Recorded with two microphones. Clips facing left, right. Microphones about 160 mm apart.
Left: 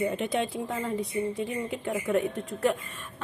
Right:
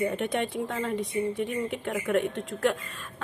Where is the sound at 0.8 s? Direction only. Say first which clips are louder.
Right 1 dB; 75° right (ahead or behind).